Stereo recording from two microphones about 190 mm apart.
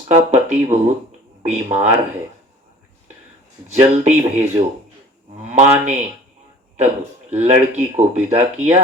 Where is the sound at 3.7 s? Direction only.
35° right (ahead or behind).